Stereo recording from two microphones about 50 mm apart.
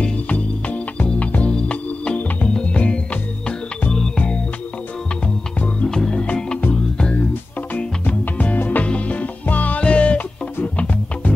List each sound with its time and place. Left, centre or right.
0.0 s music: left
5.9 s music: centre
8.1 s music: left